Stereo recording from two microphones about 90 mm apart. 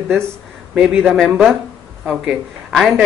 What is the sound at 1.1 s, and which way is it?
Speech, centre (ahead or behind).